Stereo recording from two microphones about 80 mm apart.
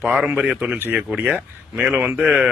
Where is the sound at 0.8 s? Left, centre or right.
Right.